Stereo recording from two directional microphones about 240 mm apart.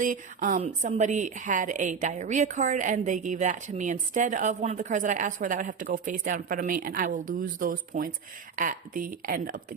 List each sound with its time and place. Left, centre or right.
0.0 s a woman's voice: right